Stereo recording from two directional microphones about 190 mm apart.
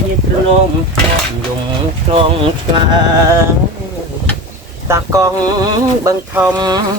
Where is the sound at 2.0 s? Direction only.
30° right (ahead or behind).